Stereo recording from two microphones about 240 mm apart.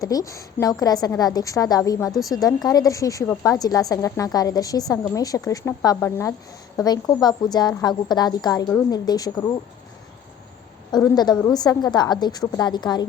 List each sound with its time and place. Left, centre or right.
0.0 s a woman's voice: centre
10.9 s a woman's voice: centre